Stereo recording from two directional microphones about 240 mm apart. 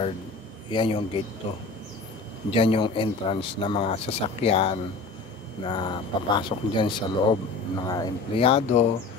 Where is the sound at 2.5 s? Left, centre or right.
Left.